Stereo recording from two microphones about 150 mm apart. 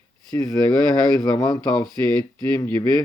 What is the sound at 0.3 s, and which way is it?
Speech, 25° left (ahead or behind).